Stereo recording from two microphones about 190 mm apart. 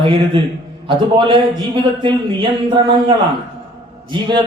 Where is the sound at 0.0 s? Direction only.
30° right (ahead or behind).